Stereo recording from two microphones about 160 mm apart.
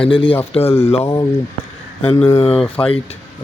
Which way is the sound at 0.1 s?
35° left (ahead or behind).